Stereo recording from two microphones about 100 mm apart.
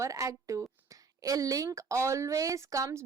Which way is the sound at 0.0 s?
35° right (ahead or behind).